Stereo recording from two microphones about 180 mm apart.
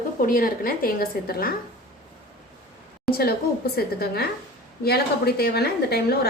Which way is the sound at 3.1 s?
60° left (ahead or behind).